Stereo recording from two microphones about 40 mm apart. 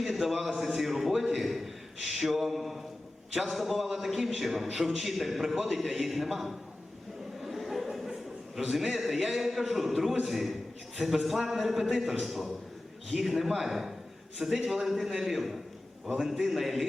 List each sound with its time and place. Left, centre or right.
0.0 s a man's voice: centre
7.4 s a sound: centre
8.9 s a man's voice: centre